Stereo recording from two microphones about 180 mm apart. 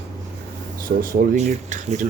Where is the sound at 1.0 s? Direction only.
50° right (ahead or behind).